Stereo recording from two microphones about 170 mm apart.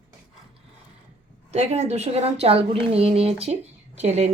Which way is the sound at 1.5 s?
40° right (ahead or behind).